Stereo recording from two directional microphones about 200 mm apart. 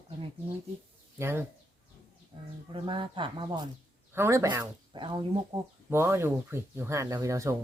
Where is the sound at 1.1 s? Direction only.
10° right (ahead or behind).